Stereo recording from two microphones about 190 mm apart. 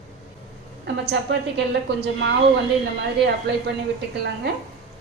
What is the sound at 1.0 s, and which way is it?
A woman's voice, 65° right (ahead or behind).